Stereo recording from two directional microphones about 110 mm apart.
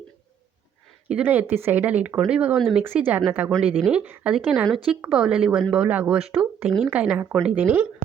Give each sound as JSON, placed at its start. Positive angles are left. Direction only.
{"t": 1.1, "sound": "speech", "side_deg": -15}
{"t": 2.6, "sound": "speech", "side_deg": 0}
{"t": 2.8, "sound": "speech", "side_deg": -20}